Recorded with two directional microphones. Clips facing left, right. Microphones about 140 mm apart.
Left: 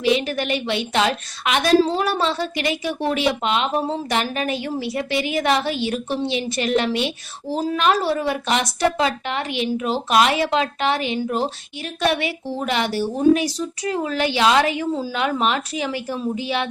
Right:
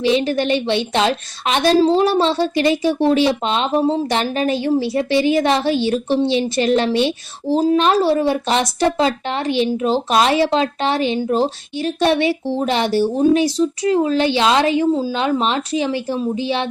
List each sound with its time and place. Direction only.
0.0 s a woman's voice: 30° right (ahead or behind)